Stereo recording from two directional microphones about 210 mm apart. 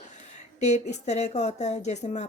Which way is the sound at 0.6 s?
35° left (ahead or behind).